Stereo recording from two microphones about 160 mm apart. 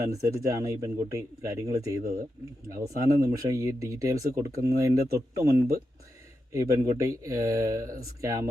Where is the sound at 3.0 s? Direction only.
20° right (ahead or behind).